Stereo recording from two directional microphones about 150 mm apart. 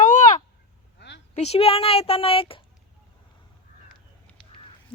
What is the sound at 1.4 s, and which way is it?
A woman's voice, 40° left (ahead or behind).